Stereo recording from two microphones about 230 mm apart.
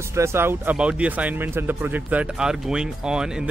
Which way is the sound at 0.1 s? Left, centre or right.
Centre.